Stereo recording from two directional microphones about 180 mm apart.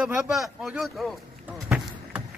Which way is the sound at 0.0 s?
5° right (ahead or behind).